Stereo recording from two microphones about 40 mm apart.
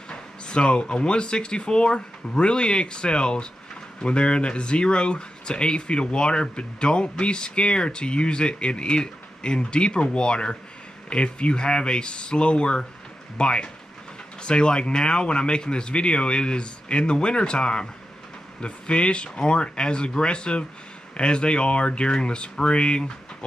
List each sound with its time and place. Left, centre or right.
0.1 s speech: left